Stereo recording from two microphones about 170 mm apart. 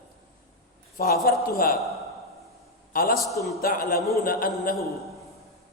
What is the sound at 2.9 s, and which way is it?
A man's voice, 55° left (ahead or behind).